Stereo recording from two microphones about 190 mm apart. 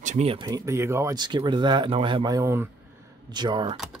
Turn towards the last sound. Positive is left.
turn(degrees=-25)  # may be behind; listen again after turning